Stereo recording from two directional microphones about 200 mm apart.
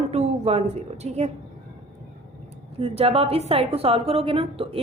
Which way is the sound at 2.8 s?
30° right (ahead or behind).